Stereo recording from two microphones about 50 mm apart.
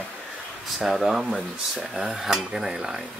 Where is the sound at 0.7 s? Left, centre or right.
Centre.